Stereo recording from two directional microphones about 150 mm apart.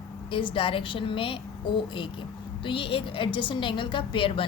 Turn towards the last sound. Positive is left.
turn(degrees=35)  # may be behind; listen again after turning